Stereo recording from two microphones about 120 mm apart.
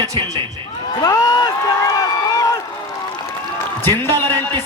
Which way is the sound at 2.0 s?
30° left (ahead or behind).